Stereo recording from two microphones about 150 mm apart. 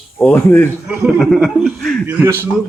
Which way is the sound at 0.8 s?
5° right (ahead or behind).